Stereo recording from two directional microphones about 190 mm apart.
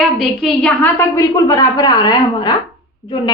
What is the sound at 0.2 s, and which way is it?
A woman's voice, 5° left (ahead or behind).